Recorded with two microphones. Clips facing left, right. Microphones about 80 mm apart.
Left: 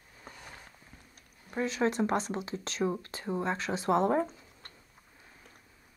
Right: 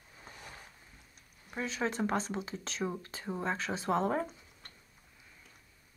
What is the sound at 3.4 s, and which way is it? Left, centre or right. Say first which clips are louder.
Speech: left 2 dB; left.